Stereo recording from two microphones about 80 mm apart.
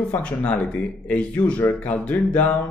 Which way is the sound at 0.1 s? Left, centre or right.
Centre.